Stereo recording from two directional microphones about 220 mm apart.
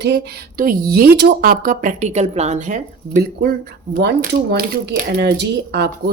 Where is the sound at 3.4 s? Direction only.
45° right (ahead or behind).